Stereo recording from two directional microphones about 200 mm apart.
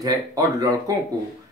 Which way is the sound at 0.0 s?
20° right (ahead or behind).